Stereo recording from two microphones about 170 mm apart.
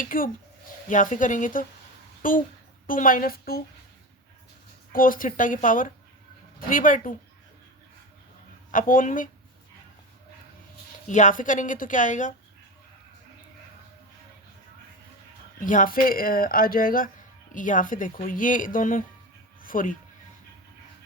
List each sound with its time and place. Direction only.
0.0 s speech: 55° left (ahead or behind)
4.9 s speech: 55° left (ahead or behind)
8.7 s speech: 50° left (ahead or behind)
11.1 s speech: 50° left (ahead or behind)
15.6 s speech: 50° left (ahead or behind)